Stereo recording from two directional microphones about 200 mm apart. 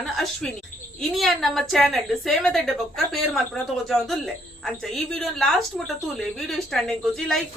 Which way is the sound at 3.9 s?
Centre (ahead or behind).